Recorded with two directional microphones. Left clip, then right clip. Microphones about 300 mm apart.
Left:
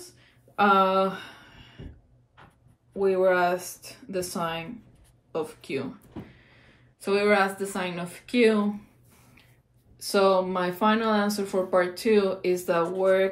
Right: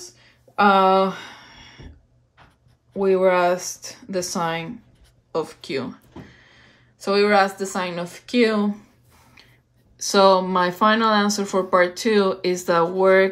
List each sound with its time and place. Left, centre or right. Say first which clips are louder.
0.6 s speech: right 5 dB; right
3.0 s speech: right 5 dB; right
7.0 s a woman's voice: right 5 dB; centre
10.1 s speech: right 6 dB; right